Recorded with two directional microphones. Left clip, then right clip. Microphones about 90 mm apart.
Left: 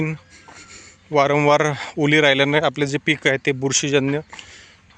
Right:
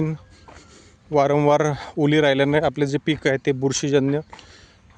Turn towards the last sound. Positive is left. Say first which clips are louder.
# left 1 dB
turn(degrees=-40)  # may be behind; listen again after turning